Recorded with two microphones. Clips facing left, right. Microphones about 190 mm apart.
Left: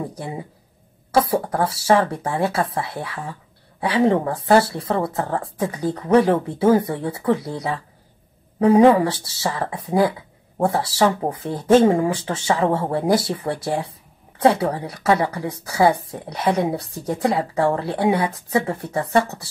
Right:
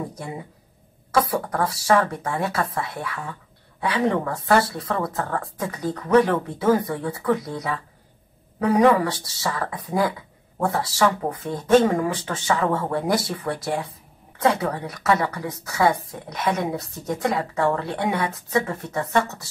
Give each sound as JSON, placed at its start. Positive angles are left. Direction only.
{"t": 1.1, "sound": "speech", "side_deg": 30}